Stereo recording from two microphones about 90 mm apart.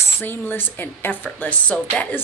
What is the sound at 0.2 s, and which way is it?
A woman's voice, 20° left (ahead or behind).